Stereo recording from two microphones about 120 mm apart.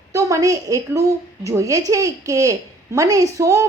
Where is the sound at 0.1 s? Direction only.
25° right (ahead or behind).